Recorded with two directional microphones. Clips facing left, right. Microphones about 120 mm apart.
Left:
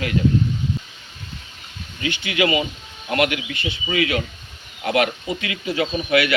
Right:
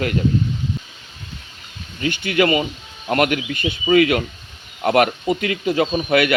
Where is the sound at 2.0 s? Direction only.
50° right (ahead or behind).